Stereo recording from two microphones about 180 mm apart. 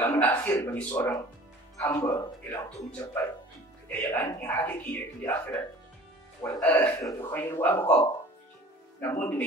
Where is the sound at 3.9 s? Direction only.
10° left (ahead or behind).